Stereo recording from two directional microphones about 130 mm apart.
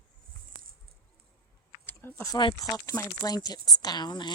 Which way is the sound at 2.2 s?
30° left (ahead or behind).